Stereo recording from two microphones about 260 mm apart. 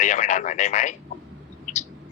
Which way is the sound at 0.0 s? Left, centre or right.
Left.